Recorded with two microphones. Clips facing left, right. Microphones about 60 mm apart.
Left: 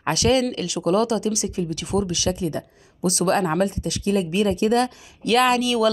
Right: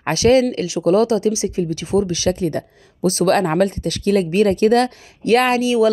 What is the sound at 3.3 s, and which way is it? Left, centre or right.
Speech, right.